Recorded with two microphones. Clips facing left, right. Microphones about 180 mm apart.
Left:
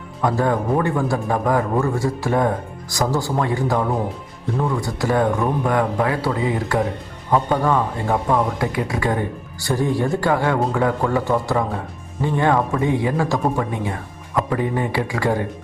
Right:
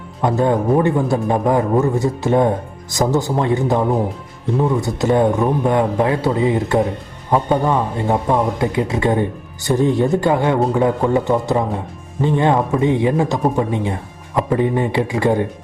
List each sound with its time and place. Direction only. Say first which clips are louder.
0.2 s speech: right 3 dB; 20° right (ahead or behind)